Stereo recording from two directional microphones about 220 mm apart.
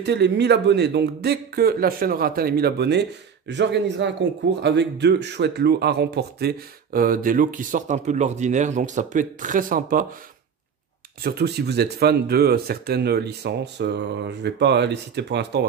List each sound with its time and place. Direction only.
0.0 s speech: 50° right (ahead or behind)
11.2 s speech: 45° right (ahead or behind)